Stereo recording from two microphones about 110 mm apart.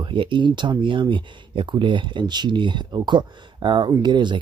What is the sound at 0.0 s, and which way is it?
Speech, 50° right (ahead or behind).